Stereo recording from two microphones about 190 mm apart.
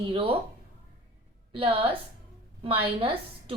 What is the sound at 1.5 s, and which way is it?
A woman's voice, 30° right (ahead or behind).